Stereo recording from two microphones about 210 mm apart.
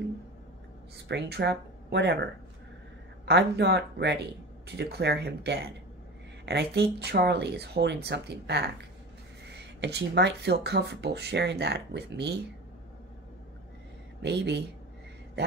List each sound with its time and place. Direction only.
0.9 s speech: 55° right (ahead or behind)
3.3 s speech: 55° right (ahead or behind)
14.2 s speech: 55° right (ahead or behind)